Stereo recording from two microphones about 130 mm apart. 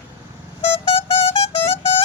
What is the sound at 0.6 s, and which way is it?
Music, 50° left (ahead or behind).